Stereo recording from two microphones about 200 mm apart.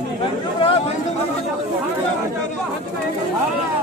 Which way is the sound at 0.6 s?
25° left (ahead or behind).